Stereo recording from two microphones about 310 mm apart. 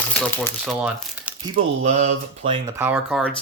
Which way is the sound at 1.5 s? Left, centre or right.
Right.